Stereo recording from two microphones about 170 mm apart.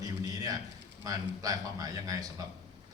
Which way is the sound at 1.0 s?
20° right (ahead or behind).